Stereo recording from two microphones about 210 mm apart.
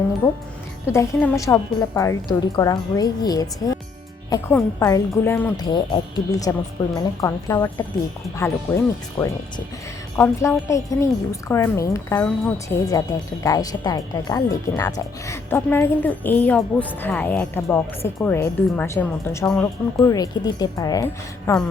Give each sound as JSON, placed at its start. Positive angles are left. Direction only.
{"t": 0.9, "sound": "speech", "side_deg": 15}